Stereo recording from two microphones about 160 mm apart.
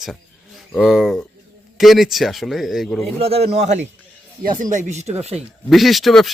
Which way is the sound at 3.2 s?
40° right (ahead or behind).